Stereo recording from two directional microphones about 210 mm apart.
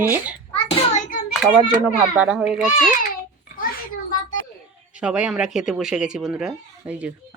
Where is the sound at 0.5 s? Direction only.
35° left (ahead or behind).